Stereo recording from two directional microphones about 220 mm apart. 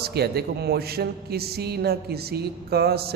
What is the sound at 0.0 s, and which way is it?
A man's voice, 45° right (ahead or behind).